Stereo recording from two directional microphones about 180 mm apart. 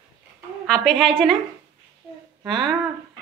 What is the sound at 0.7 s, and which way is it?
Speech, centre (ahead or behind).